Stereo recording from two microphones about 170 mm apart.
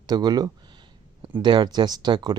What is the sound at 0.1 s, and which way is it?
Speech, 25° right (ahead or behind).